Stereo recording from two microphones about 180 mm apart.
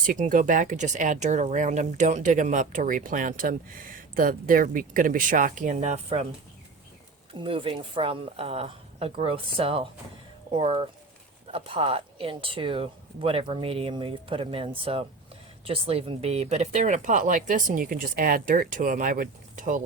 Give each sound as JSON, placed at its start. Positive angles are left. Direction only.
{"t": 0.0, "sound": "speech", "side_deg": -50}
{"t": 7.3, "sound": "speech", "side_deg": -30}